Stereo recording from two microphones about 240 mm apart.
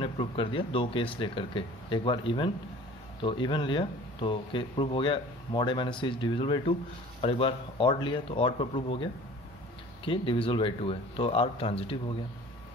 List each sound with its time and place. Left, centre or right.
0.0 s speech: left